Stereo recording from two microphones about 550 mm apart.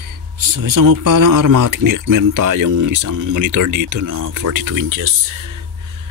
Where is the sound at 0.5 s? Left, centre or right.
Right.